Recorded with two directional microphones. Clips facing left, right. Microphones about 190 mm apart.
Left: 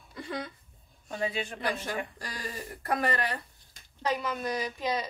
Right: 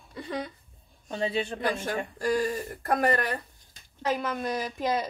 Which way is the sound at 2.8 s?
45° right (ahead or behind).